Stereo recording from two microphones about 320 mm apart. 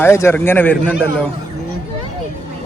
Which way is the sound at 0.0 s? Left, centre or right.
Centre.